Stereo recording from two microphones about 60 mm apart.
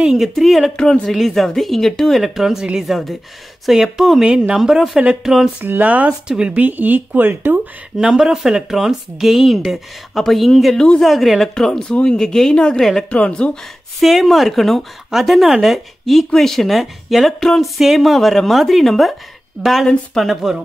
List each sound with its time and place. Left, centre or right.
0.0 s speech: centre
0.7 s a woman's voice: centre
5.6 s speech: right
8.0 s a woman's voice: centre
13.9 s speech: centre